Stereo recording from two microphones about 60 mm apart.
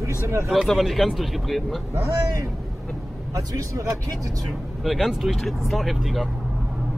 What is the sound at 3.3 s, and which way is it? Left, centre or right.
Speech, right.